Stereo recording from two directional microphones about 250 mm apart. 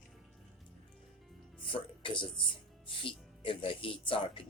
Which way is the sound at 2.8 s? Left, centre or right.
Left.